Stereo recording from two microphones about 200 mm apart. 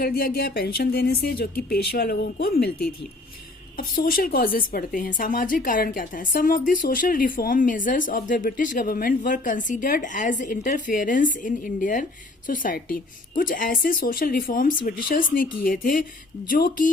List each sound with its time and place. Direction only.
0.0 s speech: 50° left (ahead or behind)